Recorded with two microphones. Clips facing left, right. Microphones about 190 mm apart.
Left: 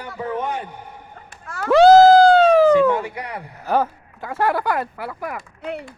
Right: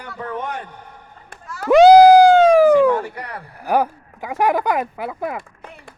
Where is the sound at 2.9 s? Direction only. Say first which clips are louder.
Right 1 dB; 10° left (ahead or behind).